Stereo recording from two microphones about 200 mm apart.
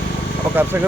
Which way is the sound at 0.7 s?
10° right (ahead or behind).